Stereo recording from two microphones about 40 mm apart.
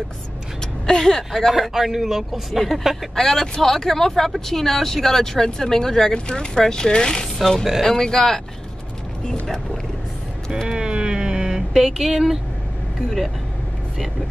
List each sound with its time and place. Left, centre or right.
0.8 s speech: centre
1.5 s speech: centre
3.2 s speech: centre
7.3 s speech: centre
10.7 s a sound: right
11.7 s speech: centre